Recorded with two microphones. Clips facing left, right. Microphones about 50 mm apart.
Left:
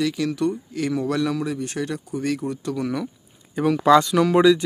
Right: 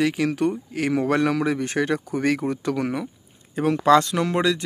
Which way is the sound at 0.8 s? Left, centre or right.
Right.